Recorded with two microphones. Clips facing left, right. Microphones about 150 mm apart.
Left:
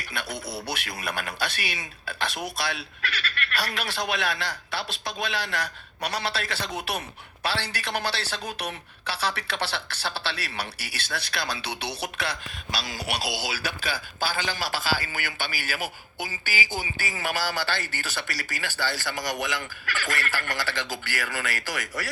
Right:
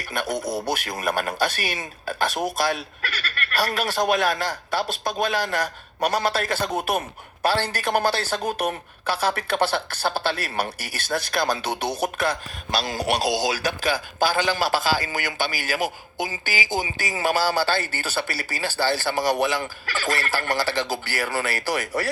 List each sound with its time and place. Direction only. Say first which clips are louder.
0.1 s speech: right 8 dB; 45° right (ahead or behind)